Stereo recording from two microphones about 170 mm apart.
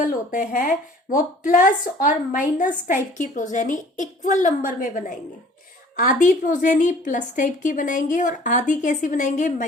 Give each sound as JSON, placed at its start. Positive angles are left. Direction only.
{"t": 0.0, "sound": "a woman's voice", "side_deg": 50}